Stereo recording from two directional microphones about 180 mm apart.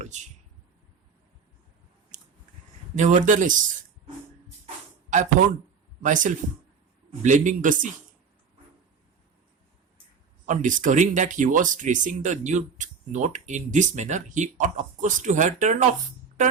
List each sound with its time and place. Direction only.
2.1 s a sound: 45° right (ahead or behind)
2.9 s speech: 40° right (ahead or behind)
5.1 s speech: 45° right (ahead or behind)
10.4 s speech: 45° right (ahead or behind)
16.4 s music: 45° right (ahead or behind)